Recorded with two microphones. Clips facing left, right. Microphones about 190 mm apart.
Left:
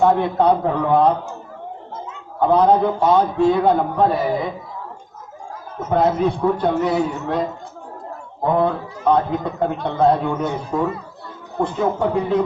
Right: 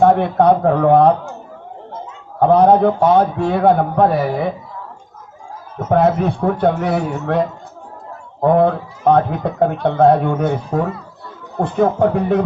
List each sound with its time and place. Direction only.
0.0 s speech: 60° right (ahead or behind)
2.4 s speech: 60° right (ahead or behind)
5.9 s speech: 60° right (ahead or behind)
8.4 s speech: 55° right (ahead or behind)